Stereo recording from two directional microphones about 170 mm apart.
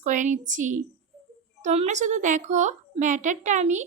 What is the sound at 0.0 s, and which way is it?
A woman's voice, 45° right (ahead or behind).